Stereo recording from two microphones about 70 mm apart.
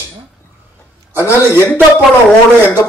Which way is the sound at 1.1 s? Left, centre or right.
Right.